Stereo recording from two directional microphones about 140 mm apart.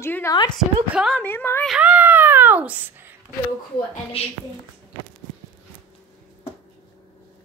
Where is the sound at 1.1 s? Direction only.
15° left (ahead or behind).